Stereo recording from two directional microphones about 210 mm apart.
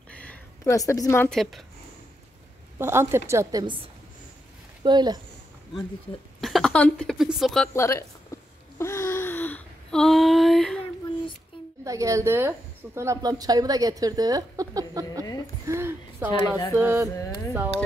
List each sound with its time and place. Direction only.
0.1 s speech: 5° left (ahead or behind)
2.8 s a woman's voice: 10° right (ahead or behind)
6.4 s speech: centre (ahead or behind)
7.7 s speech: 15° left (ahead or behind)
8.3 s wail: 15° left (ahead or behind)
8.7 s a sound: 15° left (ahead or behind)
11.8 s a woman's voice: 15° right (ahead or behind)
15.6 s a sound: 10° right (ahead or behind)
16.3 s a woman's voice: 20° left (ahead or behind)
16.7 s a woman's voice: 10° right (ahead or behind)